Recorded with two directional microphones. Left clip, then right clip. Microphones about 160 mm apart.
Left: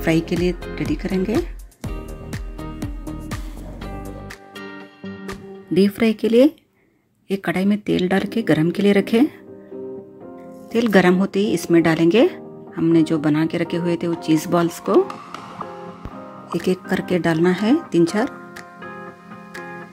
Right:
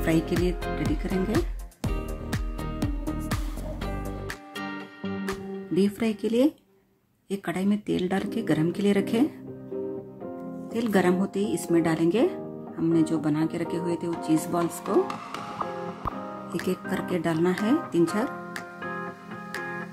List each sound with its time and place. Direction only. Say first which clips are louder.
0.0 s speech: left 5 dB; 20° left (ahead or behind)
1.8 s music: even; centre (ahead or behind)
5.8 s speech: left 9 dB; 30° left (ahead or behind)
10.7 s speech: left 8 dB; 35° left (ahead or behind)
16.4 s speech: left 9 dB; 25° left (ahead or behind)
18.8 s music: right 1 dB; centre (ahead or behind)